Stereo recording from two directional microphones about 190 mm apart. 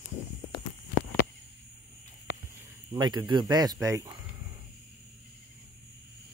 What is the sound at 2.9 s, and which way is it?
Speech, 25° right (ahead or behind).